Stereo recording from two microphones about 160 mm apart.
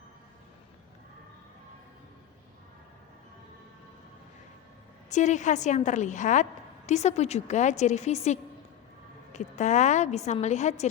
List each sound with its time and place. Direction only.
5.0 s a woman's voice: 50° left (ahead or behind)